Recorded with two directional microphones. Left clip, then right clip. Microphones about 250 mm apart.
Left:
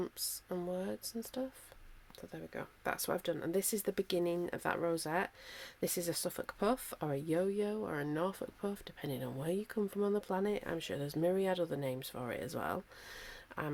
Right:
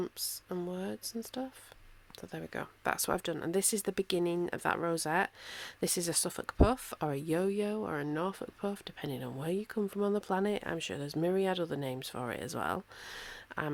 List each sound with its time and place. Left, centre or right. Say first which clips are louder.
0.0 s speech: right 3 dB; centre
2.3 s speech: right 5 dB; right